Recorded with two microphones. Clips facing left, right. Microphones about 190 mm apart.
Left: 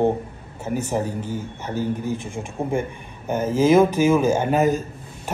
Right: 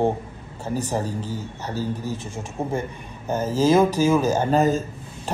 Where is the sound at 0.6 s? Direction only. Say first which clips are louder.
Left 2 dB; 15° left (ahead or behind).